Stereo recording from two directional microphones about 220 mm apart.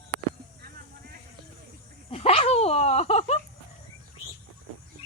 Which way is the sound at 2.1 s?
25° left (ahead or behind).